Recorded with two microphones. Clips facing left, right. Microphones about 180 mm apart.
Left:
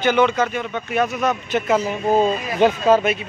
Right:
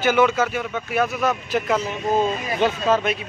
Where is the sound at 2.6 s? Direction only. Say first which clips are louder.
Left 5 dB; 10° left (ahead or behind).